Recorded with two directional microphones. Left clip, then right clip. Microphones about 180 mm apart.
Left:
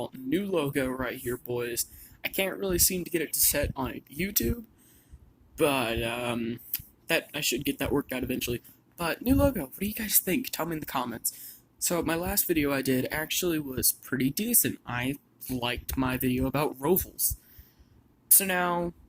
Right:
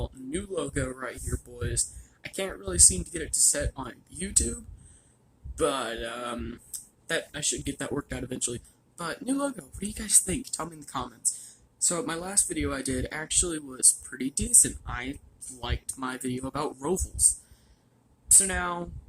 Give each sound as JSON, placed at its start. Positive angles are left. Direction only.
{"t": 0.0, "sound": "speech", "side_deg": 10}
{"t": 18.3, "sound": "speech", "side_deg": 10}